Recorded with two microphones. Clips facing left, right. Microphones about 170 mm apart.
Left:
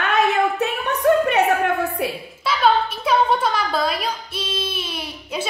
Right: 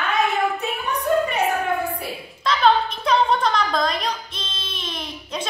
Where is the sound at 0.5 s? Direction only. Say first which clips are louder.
Left 3 dB; 75° left (ahead or behind).